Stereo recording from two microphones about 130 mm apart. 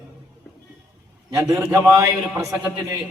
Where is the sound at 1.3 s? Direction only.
25° right (ahead or behind).